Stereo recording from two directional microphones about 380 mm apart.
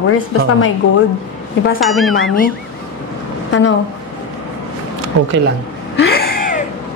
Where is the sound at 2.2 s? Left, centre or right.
Left.